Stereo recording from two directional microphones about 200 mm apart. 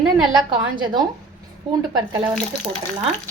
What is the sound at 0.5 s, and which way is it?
A woman's voice, 20° right (ahead or behind).